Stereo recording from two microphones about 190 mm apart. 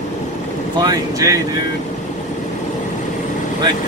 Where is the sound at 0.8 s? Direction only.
20° right (ahead or behind).